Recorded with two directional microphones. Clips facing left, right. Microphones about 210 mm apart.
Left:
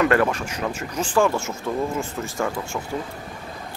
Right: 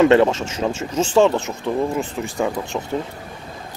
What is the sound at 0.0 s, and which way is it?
Speech, 25° right (ahead or behind).